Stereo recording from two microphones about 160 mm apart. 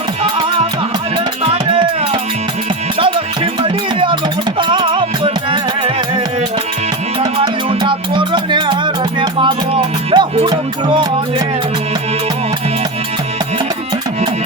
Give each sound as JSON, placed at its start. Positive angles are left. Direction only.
{"t": 3.0, "sound": "music", "side_deg": -30}
{"t": 7.2, "sound": "music", "side_deg": -25}